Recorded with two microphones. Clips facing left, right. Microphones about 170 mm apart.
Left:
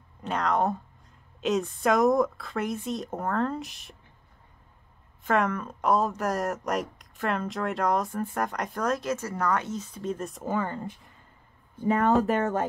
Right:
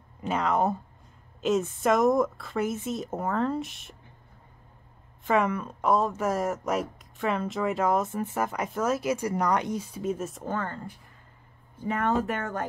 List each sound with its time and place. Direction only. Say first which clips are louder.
0.2 s speech: right 1 dB; 5° right (ahead or behind)
5.2 s speech: right 1 dB; centre (ahead or behind)
11.9 s speech: left 4 dB; 35° left (ahead or behind)